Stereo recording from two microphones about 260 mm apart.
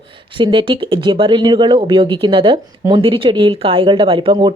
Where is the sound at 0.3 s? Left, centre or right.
Centre.